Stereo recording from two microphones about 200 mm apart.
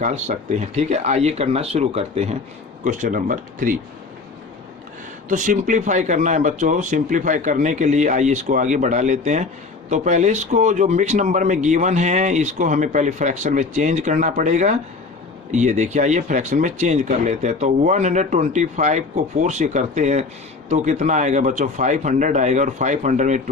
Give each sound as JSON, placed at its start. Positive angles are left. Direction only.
{"t": 0.0, "sound": "speech", "side_deg": -35}
{"t": 5.3, "sound": "speech", "side_deg": -40}